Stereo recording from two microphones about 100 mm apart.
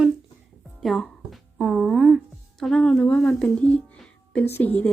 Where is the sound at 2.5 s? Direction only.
5° left (ahead or behind).